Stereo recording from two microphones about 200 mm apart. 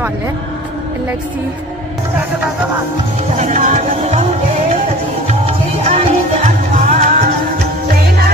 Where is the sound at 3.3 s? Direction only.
35° right (ahead or behind).